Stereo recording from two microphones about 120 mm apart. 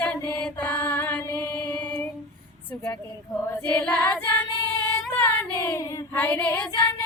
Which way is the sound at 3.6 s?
15° left (ahead or behind).